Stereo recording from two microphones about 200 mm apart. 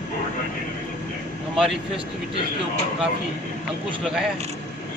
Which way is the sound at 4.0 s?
Centre (ahead or behind).